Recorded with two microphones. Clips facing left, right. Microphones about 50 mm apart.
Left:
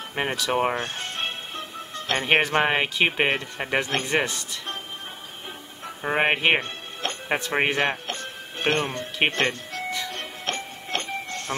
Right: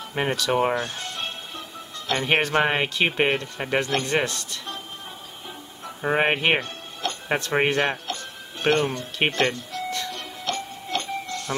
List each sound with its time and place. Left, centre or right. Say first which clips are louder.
0.1 s speech: right 2 dB; centre
0.7 s music: even; left
2.2 s speech: even; centre
6.0 s speech: even; centre
6.6 s music: right 1 dB; left
7.2 s speech: right 1 dB; centre
8.1 s music: even; left
9.3 s speech: right 1 dB; left
9.8 s music: even; centre
10.1 s music: right 1 dB; left